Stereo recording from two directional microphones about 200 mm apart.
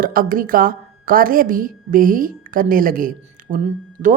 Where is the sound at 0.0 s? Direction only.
45° right (ahead or behind).